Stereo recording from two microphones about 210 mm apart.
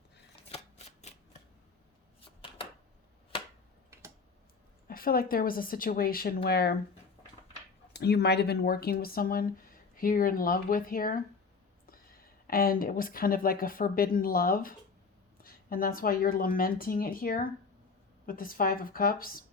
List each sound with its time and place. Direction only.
4.9 s speech: 45° left (ahead or behind)
7.9 s a woman's voice: 50° left (ahead or behind)